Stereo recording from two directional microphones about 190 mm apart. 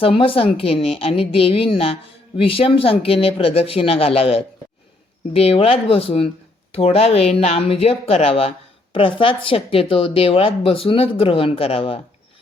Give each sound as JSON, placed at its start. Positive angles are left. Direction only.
{"t": 0.0, "sound": "speech", "side_deg": 30}